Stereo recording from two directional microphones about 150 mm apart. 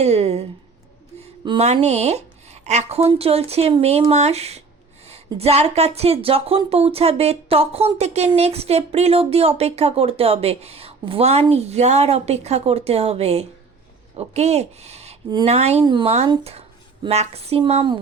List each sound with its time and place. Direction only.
0.0 s speech: 45° right (ahead or behind)
15.8 s speech: 30° right (ahead or behind)